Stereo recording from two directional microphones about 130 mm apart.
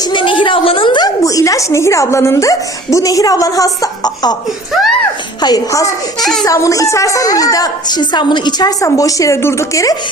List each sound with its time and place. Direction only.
0.0 s a woman's voice: 40° left (ahead or behind)
5.4 s a woman's voice: 30° left (ahead or behind)